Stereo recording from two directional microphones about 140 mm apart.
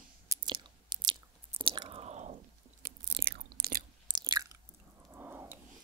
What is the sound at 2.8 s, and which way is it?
Biting, 90° right.